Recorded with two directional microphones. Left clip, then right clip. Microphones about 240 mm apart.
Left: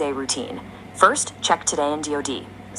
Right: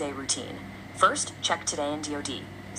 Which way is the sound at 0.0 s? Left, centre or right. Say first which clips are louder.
Left 7 dB; left.